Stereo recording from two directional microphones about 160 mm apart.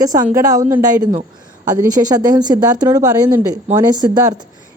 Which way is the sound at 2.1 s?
25° right (ahead or behind).